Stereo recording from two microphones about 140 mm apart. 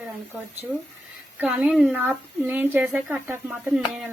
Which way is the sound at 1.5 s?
5° right (ahead or behind).